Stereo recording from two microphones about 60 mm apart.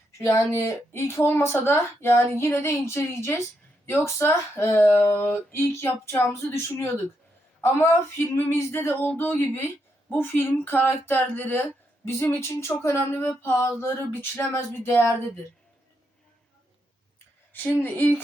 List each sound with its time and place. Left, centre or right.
0.2 s speech: left
12.0 s speech: left
17.5 s speech: left